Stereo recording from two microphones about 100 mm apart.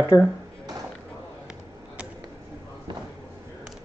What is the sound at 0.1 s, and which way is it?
Speech, 35° left (ahead or behind).